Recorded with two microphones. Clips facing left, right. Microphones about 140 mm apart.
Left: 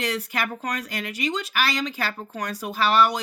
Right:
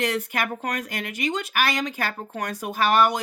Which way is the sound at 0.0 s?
50° right (ahead or behind).